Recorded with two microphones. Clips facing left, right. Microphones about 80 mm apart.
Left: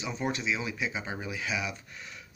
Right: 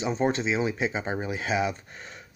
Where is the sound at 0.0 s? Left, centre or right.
Right.